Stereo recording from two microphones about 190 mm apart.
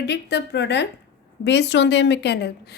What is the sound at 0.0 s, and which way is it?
A woman's voice, 60° left (ahead or behind).